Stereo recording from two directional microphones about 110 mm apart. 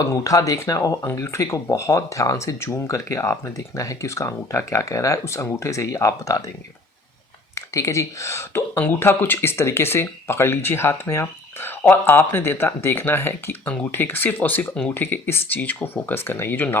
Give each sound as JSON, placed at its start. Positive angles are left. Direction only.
{"t": 0.0, "sound": "speech", "side_deg": 30}
{"t": 7.5, "sound": "speech", "side_deg": 25}